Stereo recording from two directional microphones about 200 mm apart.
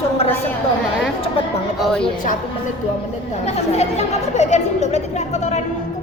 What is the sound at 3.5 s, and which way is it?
Speech, 30° left (ahead or behind).